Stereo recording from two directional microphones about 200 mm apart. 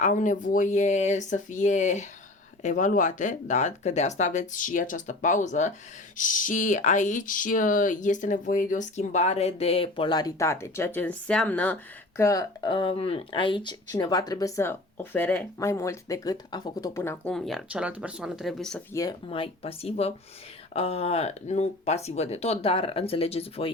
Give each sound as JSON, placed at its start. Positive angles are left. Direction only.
{"t": 0.0, "sound": "speech", "side_deg": 40}
{"t": 19.3, "sound": "speech", "side_deg": 30}